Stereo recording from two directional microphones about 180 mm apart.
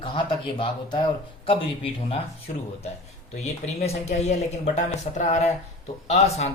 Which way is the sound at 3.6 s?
35° left (ahead or behind).